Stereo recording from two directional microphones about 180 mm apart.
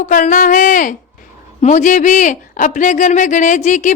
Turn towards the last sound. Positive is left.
turn(degrees=40)  # may be behind; listen again after turning